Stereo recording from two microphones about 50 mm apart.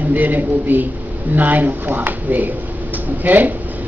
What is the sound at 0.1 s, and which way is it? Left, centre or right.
A woman's voice, right.